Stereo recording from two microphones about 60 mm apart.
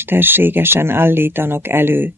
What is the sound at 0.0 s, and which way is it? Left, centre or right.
Speech, right.